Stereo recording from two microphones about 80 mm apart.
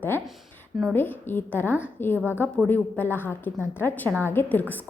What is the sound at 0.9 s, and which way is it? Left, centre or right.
A woman's voice, left.